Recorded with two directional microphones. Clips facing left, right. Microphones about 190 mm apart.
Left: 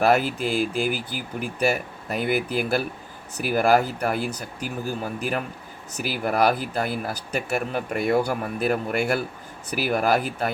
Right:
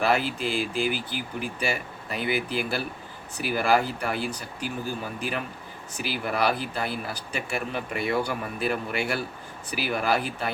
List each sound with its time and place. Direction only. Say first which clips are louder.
0.0 s speech: left 4 dB; 45° left (ahead or behind)
6.0 s speech: left 4 dB; 45° left (ahead or behind)